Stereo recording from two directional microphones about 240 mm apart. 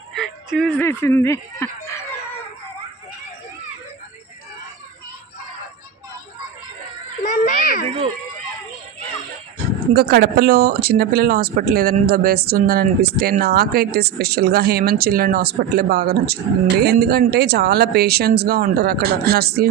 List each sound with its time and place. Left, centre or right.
0.2 s speech: centre
7.2 s a sound: left
9.9 s speech: right